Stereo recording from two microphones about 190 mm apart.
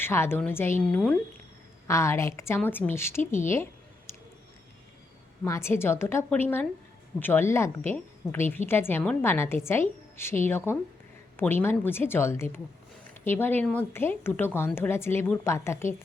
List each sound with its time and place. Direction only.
0.0 s a woman's voice: 10° left (ahead or behind)
3.5 s a sound: 15° left (ahead or behind)
5.5 s a woman's voice: 15° left (ahead or behind)